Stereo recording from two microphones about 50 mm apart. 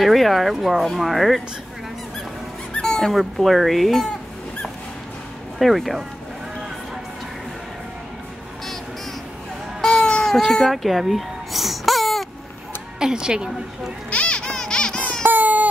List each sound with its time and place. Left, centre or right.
0.0 s speech: centre
2.7 s speech: centre
5.6 s speech: centre
9.8 s baby cry: centre
10.5 s baby cry: centre
13.0 s speech: centre
14.1 s music: left
15.2 s baby cry: right